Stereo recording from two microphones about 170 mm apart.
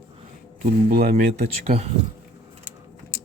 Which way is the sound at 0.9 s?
60° right (ahead or behind).